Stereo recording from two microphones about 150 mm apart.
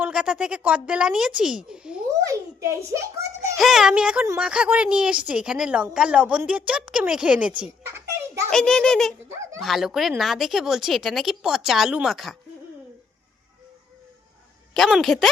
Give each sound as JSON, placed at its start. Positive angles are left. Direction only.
{"t": 0.0, "sound": "speech", "side_deg": -5}
{"t": 2.2, "sound": "a sound", "side_deg": -20}
{"t": 3.6, "sound": "a woman's voice", "side_deg": 0}
{"t": 8.4, "sound": "speech", "side_deg": 5}
{"t": 9.3, "sound": "speech", "side_deg": -20}
{"t": 9.6, "sound": "speech", "side_deg": 0}
{"t": 14.7, "sound": "speech", "side_deg": 0}